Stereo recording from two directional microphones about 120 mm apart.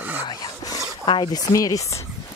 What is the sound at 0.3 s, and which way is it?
Zipper, 35° left (ahead or behind).